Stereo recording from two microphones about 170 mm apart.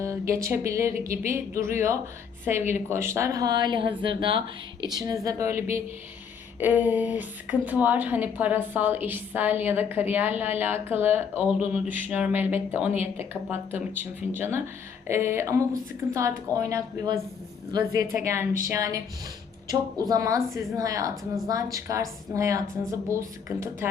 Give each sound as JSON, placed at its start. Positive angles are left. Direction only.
{"t": 0.0, "sound": "a woman's voice", "side_deg": -15}
{"t": 20.1, "sound": "a woman's voice", "side_deg": -20}